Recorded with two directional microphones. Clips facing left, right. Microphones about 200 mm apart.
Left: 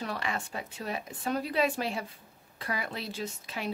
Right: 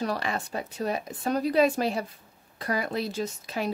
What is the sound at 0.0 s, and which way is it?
Speech, 40° right (ahead or behind).